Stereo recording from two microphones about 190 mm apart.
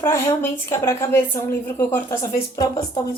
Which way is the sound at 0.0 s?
15° left (ahead or behind).